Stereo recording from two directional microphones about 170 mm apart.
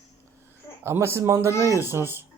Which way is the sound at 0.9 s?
15° right (ahead or behind).